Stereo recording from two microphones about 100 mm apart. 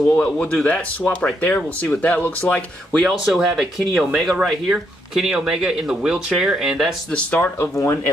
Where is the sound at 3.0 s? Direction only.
Centre (ahead or behind).